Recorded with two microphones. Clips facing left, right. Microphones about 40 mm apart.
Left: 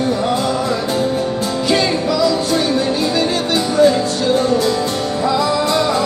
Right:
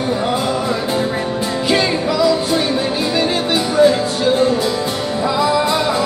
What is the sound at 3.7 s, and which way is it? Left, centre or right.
Music, centre.